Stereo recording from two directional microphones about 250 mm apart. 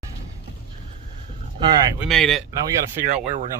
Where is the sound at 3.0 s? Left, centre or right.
Right.